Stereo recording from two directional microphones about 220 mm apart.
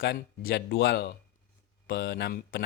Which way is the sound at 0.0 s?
45° left (ahead or behind).